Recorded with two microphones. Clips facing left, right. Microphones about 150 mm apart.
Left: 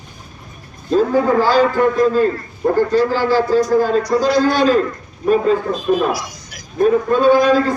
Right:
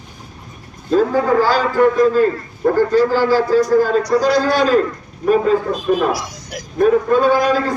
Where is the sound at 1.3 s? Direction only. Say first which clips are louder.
Even; 10° right (ahead or behind).